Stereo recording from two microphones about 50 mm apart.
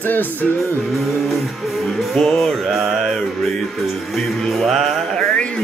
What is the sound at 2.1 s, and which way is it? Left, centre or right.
Speech, centre.